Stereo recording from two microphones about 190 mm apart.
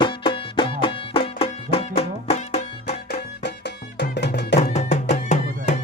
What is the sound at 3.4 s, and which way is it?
Music, 65° left (ahead or behind).